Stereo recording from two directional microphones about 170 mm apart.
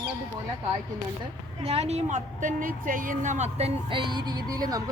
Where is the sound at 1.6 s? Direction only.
40° right (ahead or behind); by 4.8 s 20° right (ahead or behind).